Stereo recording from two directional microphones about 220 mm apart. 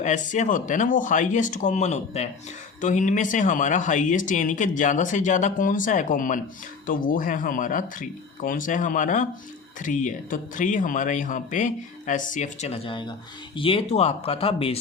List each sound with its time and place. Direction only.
0.0 s speech: 35° left (ahead or behind)